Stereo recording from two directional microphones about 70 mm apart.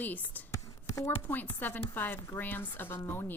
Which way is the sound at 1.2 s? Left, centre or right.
Left.